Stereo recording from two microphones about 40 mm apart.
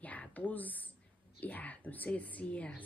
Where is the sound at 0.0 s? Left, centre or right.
Left.